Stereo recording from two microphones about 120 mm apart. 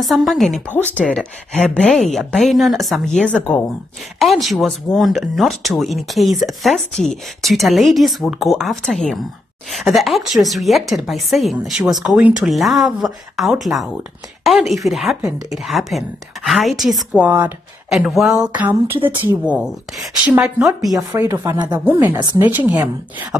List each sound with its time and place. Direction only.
0.0 s speech: centre (ahead or behind)
0.7 s a woman's voice: 10° left (ahead or behind)
17.2 s a woman's voice: 15° right (ahead or behind)
17.9 s a woman's voice: 5° right (ahead or behind)
18.9 s speech: 45° right (ahead or behind)
19.2 s a woman's voice: 10° right (ahead or behind)
20.6 s speech: centre (ahead or behind)
21.2 s speech: 25° right (ahead or behind)
21.5 s speech: 35° right (ahead or behind)
22.0 s a woman's voice: 15° right (ahead or behind)